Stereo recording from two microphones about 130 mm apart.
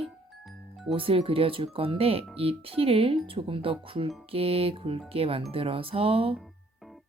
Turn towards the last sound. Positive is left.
turn(degrees=-45)  # may be behind; listen again after turning